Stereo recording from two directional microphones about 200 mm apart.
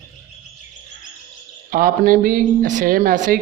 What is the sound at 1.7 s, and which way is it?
Speech, 45° right (ahead or behind).